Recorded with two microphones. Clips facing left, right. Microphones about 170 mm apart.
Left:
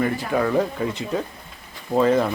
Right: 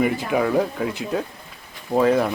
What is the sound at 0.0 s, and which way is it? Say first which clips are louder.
Speech: right 1 dB; 15° right (ahead or behind).